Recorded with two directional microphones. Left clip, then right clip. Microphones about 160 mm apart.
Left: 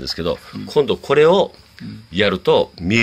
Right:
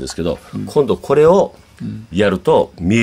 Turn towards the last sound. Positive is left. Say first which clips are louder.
# right 2 dB
turn(degrees=-10)  # may be behind; listen again after turning